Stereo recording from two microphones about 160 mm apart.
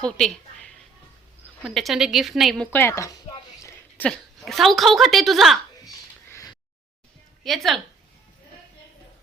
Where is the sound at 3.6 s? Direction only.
10° left (ahead or behind).